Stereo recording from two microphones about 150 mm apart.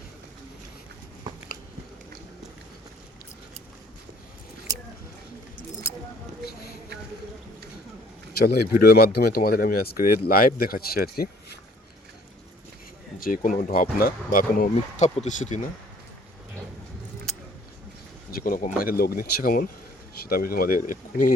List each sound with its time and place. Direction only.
4.7 s a sound: 25° right (ahead or behind)
8.3 s speech: 90° left
13.1 s speech: 70° left (ahead or behind)
14.9 s speech: 50° left (ahead or behind)
18.3 s speech: 75° left (ahead or behind)
18.8 s speech: 80° left; by 21.3 s 60° left (ahead or behind)